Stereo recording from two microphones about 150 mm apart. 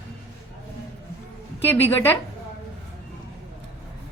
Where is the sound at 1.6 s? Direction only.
15° left (ahead or behind).